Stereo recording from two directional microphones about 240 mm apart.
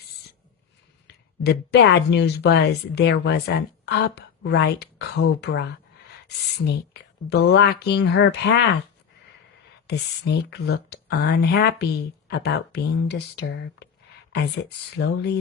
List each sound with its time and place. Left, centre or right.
1.0 s speech: left
9.8 s speech: left
14.9 s speech: left